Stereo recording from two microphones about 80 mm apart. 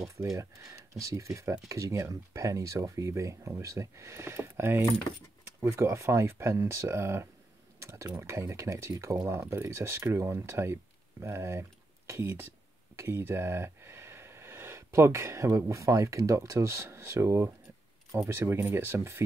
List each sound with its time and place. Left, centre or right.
0.4 s speech: right
18.4 s speech: right